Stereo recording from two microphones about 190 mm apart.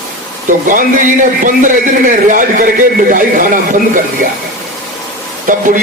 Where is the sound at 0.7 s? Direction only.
45° right (ahead or behind).